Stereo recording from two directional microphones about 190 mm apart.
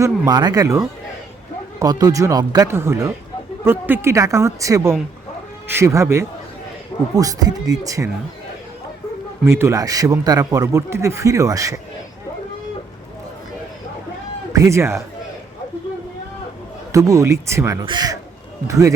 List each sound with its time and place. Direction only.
0.0 s speech: 20° right (ahead or behind)
9.5 s speech: 15° right (ahead or behind)
14.5 s speech: 15° right (ahead or behind)
16.9 s speech: 15° right (ahead or behind)